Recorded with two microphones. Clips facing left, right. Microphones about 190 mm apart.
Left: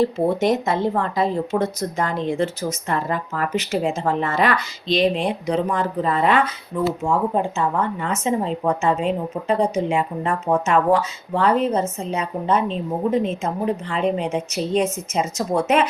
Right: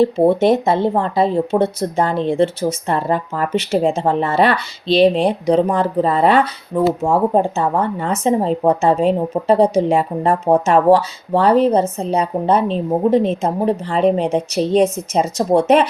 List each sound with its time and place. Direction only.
0.0 s speech: 30° right (ahead or behind)